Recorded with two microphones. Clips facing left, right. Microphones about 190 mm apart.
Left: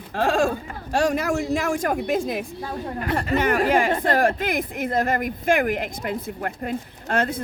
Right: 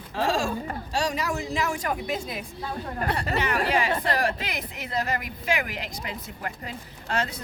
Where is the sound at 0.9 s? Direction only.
50° left (ahead or behind).